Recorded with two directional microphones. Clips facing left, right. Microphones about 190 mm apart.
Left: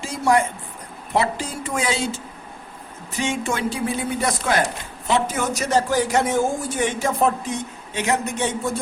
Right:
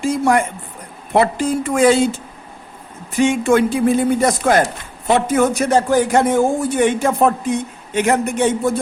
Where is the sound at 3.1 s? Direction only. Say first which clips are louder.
Right 10 dB; 55° right (ahead or behind).